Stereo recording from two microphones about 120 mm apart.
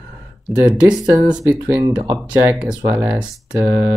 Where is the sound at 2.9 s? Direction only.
15° right (ahead or behind).